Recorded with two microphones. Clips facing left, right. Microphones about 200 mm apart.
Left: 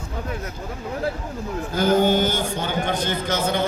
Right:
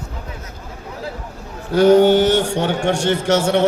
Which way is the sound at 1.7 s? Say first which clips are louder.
Right 8 dB; 70° right (ahead or behind).